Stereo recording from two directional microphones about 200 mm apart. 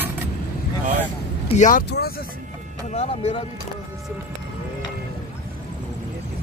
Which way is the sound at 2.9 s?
35° left (ahead or behind).